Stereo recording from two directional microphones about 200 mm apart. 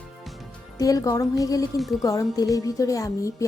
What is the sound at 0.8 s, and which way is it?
Speech, 15° left (ahead or behind).